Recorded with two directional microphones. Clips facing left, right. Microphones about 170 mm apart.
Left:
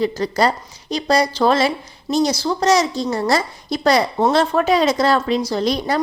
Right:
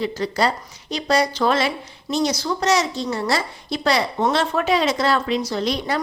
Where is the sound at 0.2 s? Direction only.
40° left (ahead or behind).